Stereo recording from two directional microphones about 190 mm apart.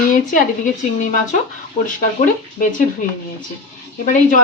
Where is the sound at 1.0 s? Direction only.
40° left (ahead or behind).